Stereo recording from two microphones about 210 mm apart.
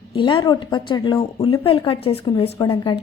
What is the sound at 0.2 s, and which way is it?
Speech, 20° left (ahead or behind).